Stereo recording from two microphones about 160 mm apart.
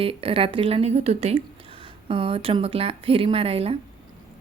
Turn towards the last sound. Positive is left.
turn(degrees=-40)  # may be behind; listen again after turning